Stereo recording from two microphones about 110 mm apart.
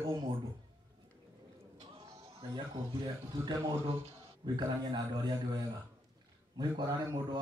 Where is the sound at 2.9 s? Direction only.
45° right (ahead or behind).